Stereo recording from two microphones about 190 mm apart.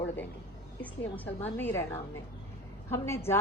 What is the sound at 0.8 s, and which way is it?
A woman's voice, 10° left (ahead or behind).